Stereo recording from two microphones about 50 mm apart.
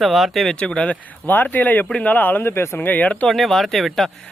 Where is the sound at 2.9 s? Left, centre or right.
Left.